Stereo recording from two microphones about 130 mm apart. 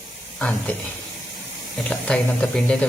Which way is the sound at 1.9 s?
5° left (ahead or behind).